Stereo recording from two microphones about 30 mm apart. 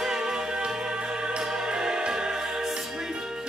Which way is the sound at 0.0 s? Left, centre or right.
Centre.